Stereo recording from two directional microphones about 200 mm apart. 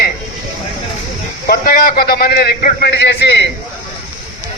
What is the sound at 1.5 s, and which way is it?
A man's voice, 50° left (ahead or behind).